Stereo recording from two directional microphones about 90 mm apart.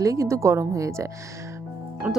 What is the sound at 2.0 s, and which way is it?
Speech, 15° right (ahead or behind).